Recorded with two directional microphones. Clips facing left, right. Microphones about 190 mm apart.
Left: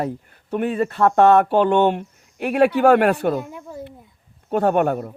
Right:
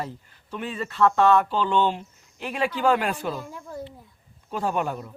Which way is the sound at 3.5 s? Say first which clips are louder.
Left 2 dB; 10° left (ahead or behind).